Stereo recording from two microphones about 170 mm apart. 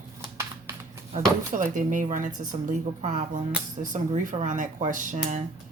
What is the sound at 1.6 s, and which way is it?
Speech, 50° right (ahead or behind).